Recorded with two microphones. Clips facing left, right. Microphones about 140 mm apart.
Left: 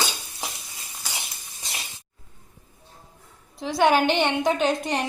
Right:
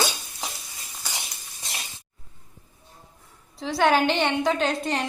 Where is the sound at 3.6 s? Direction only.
20° left (ahead or behind).